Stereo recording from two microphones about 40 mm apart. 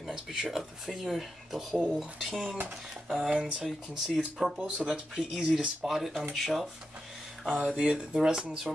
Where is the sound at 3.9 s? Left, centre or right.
Centre.